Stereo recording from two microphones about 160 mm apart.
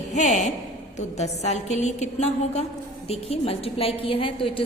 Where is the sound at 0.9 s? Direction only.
45° left (ahead or behind).